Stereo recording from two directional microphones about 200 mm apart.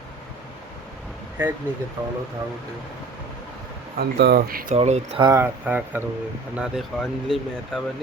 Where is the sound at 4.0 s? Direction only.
55° right (ahead or behind).